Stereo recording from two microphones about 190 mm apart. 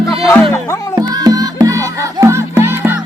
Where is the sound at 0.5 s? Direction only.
15° left (ahead or behind).